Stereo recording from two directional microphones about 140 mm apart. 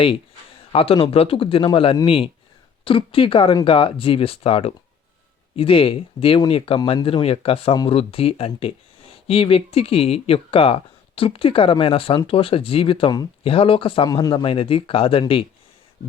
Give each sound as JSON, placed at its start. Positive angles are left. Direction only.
{"t": 0.7, "sound": "speech", "side_deg": 40}
{"t": 14.1, "sound": "a man's voice", "side_deg": 30}
{"t": 14.4, "sound": "speech", "side_deg": 40}